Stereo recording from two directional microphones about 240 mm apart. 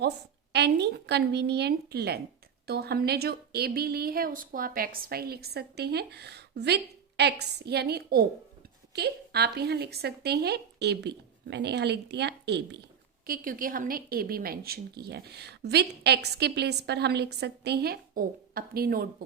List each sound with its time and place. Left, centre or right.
0.5 s a woman's voice: right